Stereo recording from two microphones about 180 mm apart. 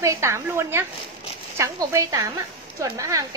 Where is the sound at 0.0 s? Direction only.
15° right (ahead or behind).